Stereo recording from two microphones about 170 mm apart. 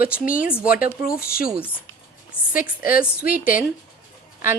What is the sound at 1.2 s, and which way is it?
Speech, 60° left (ahead or behind).